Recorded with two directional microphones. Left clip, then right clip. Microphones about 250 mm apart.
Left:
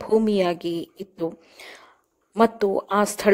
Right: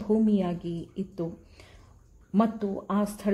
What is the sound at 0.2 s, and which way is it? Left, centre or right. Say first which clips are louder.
Speech: left 7 dB; left.